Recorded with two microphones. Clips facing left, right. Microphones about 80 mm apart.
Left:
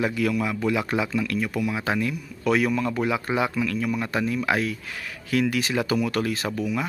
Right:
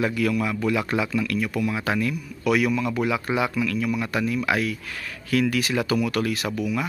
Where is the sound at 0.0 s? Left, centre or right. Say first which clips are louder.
Right 1 dB; left.